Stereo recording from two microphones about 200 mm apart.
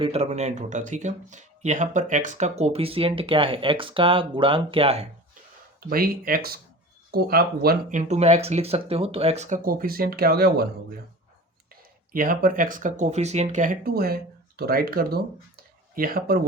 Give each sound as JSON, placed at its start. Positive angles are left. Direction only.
{"t": 0.0, "sound": "speech", "side_deg": -30}
{"t": 5.9, "sound": "speech", "side_deg": -45}